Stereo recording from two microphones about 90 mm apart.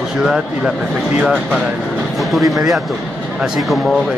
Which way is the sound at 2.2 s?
Centre (ahead or behind).